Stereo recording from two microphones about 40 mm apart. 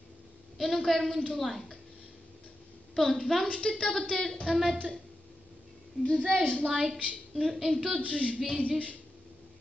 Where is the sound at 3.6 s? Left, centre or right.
Centre.